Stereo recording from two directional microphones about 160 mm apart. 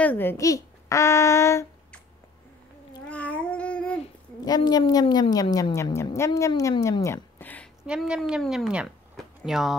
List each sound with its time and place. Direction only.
0.0 s a child's voice: 10° left (ahead or behind)
3.1 s babbling: 10° left (ahead or behind)
4.5 s a woman's voice: 25° left (ahead or behind); by 7.7 s 10° left (ahead or behind)
7.8 s speech: 5° right (ahead or behind)